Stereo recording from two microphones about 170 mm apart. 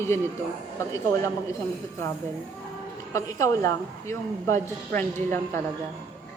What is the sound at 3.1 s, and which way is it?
A woman's voice, 20° left (ahead or behind).